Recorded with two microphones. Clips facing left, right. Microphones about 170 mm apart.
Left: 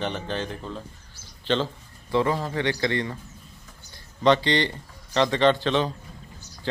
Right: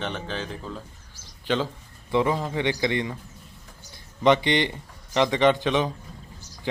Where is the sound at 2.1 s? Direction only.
15° right (ahead or behind).